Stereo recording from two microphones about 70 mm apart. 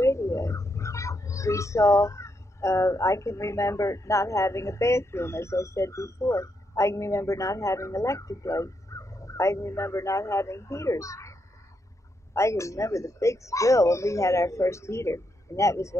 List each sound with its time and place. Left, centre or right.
0.0 s speech: left
12.4 s speech: left